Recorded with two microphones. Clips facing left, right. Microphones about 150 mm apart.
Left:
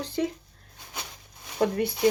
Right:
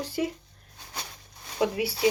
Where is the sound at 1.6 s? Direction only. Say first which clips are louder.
Left 1 dB; 5° right (ahead or behind).